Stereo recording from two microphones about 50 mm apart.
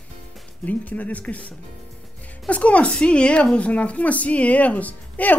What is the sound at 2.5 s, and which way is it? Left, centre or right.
Speech, left.